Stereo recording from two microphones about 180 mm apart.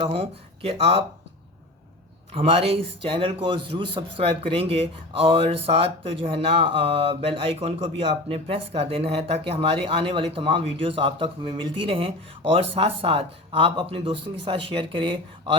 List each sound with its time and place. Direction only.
0.0 s speech: 35° right (ahead or behind)
2.3 s speech: 30° right (ahead or behind)